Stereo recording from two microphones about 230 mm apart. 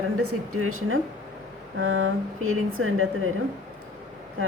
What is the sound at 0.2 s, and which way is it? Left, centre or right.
Speech, right.